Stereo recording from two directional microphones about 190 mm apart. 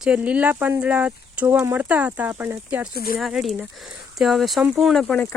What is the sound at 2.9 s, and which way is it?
Speech, 50° left (ahead or behind).